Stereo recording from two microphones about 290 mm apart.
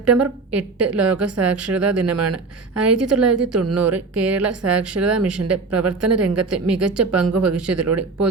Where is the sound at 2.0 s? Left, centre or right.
Right.